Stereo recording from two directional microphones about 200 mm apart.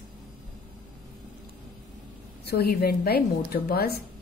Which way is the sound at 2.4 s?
55° left (ahead or behind).